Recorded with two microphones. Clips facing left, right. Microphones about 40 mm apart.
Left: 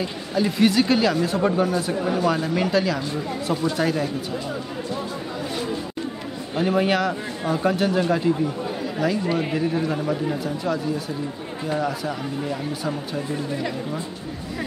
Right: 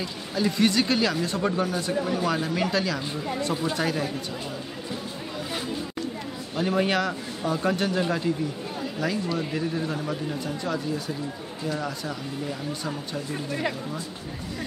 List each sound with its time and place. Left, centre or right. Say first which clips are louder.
0.3 s speech: left 3 dB; centre
6.5 s a man's voice: left 3 dB; centre
9.2 s a man's voice: left 5 dB; left
10.4 s speech: left 4 dB; centre
11.8 s a man's voice: left 6 dB; centre